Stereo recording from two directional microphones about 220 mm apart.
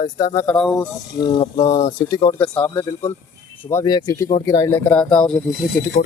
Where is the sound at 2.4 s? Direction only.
5° left (ahead or behind).